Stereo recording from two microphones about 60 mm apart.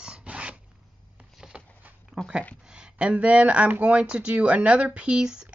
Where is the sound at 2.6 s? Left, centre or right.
Centre.